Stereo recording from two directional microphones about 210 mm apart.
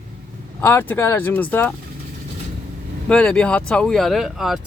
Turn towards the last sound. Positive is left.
turn(degrees=0)  # may be behind; listen again after turning